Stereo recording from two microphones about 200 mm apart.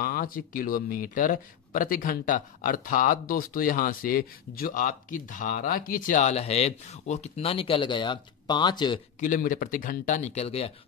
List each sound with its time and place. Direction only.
0.0 s speech: 45° left (ahead or behind); by 9.0 s 20° left (ahead or behind)
9.2 s speech: 40° left (ahead or behind)